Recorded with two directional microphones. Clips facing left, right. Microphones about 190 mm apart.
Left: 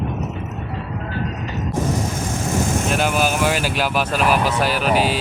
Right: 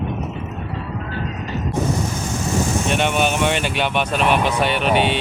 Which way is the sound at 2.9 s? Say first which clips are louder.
Right 1 dB; centre (ahead or behind).